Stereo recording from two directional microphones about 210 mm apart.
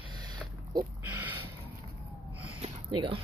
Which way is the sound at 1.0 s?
10° right (ahead or behind).